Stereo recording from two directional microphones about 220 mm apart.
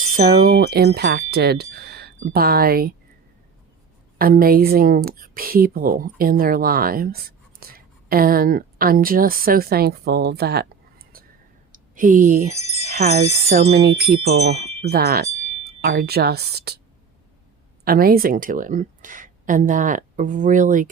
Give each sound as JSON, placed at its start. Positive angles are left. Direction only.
{"t": 0.3, "sound": "speech", "side_deg": -45}
{"t": 4.2, "sound": "a woman's voice", "side_deg": -40}
{"t": 13.7, "sound": "speech", "side_deg": -45}
{"t": 14.5, "sound": "wind chime", "side_deg": -30}
{"t": 14.8, "sound": "speech", "side_deg": -45}
{"t": 17.8, "sound": "speech", "side_deg": -45}